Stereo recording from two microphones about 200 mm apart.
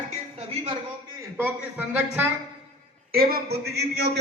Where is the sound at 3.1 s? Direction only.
50° right (ahead or behind).